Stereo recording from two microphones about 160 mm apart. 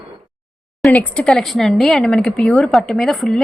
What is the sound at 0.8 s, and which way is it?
A woman's voice, 5° left (ahead or behind).